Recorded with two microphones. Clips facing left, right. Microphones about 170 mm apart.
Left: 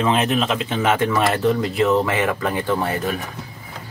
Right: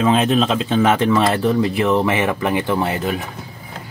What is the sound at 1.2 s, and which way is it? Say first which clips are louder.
Speech: right 2 dB; 20° right (ahead or behind).